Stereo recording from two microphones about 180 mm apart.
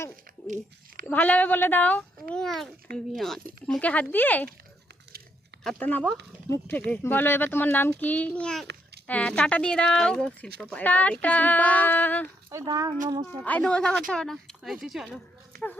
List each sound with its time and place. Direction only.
0.4 s speech: 45° right (ahead or behind)
1.0 s speech: 10° left (ahead or behind)
5.6 s speech: 5° left (ahead or behind)
12.5 s speech: 20° right (ahead or behind)
13.4 s speech: 5° left (ahead or behind)